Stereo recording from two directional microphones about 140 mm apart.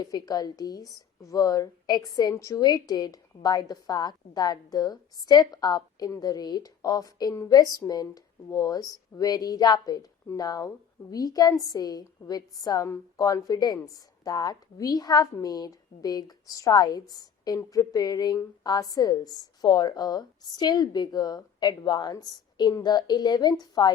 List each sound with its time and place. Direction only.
0.0 s a woman's voice: 25° left (ahead or behind)